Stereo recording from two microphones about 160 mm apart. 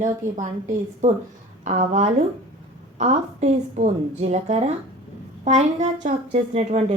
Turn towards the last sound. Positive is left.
turn(degrees=-45)  # may be behind; listen again after turning